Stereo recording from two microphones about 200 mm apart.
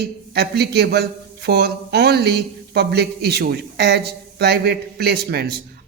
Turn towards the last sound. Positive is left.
turn(degrees=-50)  # may be behind; listen again after turning